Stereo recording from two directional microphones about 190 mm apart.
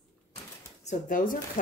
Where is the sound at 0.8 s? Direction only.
45° left (ahead or behind).